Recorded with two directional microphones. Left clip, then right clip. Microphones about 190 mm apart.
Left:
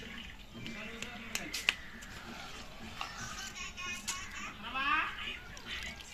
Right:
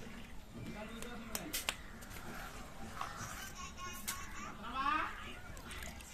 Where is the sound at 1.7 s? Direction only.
65° right (ahead or behind).